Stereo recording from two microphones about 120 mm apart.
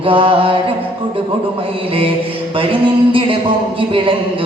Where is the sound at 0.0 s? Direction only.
45° right (ahead or behind).